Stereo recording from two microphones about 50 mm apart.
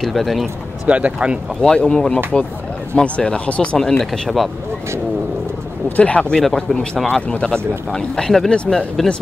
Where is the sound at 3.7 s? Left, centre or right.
Centre.